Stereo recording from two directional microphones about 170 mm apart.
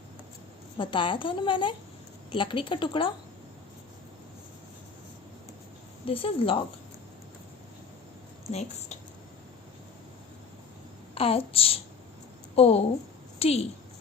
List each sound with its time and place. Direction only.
0.8 s a woman's voice: 30° left (ahead or behind)
6.1 s a child's voice: 30° left (ahead or behind)
8.4 s a child's voice: 40° left (ahead or behind)
11.1 s a child's voice: 35° left (ahead or behind)